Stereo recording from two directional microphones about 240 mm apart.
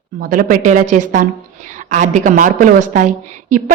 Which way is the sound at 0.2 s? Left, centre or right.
Right.